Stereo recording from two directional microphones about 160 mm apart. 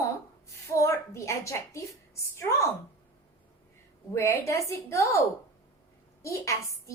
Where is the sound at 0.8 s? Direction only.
20° left (ahead or behind).